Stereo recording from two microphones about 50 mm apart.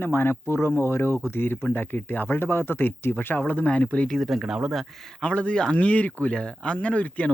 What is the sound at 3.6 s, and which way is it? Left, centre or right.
Speech, left.